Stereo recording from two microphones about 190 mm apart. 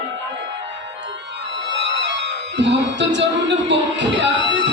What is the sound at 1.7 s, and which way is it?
Music, 70° right (ahead or behind).